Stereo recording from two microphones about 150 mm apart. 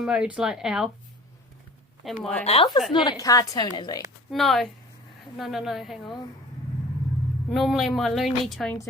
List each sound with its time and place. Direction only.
0.0 s speech: 5° right (ahead or behind)
2.0 s speech: centre (ahead or behind)
2.4 s a woman's voice: 40° left (ahead or behind)
2.9 s a woman's voice: 30° left (ahead or behind)
4.3 s speech: centre (ahead or behind)
7.5 s speech: centre (ahead or behind)